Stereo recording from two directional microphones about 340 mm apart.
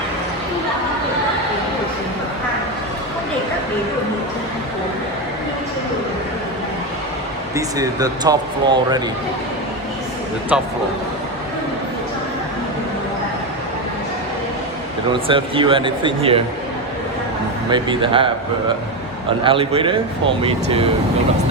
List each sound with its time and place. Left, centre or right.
7.5 s speech: centre
10.5 s speech: centre
15.1 s speech: centre
17.7 s speech: centre
19.5 s speech: centre